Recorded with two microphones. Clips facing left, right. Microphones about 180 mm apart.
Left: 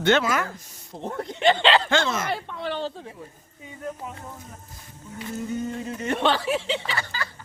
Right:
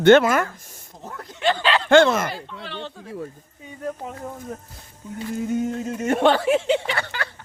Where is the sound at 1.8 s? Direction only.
55° right (ahead or behind).